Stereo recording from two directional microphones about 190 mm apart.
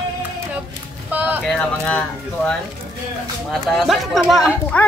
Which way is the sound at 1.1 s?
10° right (ahead or behind).